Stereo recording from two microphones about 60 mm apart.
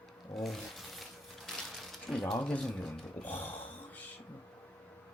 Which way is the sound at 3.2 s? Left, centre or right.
Left.